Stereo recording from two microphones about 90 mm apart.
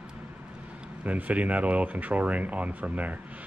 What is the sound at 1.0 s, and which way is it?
Speech, 15° right (ahead or behind).